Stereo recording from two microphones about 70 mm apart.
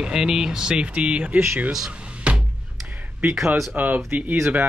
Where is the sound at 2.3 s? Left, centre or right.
Centre.